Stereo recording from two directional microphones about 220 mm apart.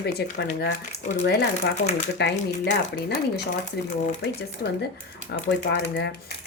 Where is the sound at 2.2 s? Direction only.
50° left (ahead or behind).